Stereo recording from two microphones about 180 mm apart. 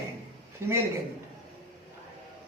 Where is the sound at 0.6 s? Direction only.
15° right (ahead or behind).